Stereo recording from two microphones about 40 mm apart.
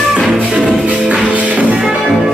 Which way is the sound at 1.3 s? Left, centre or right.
Right.